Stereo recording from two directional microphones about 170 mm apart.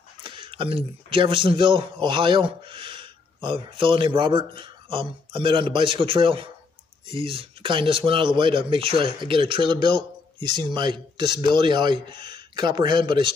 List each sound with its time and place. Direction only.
0.2 s a man's voice: 30° right (ahead or behind)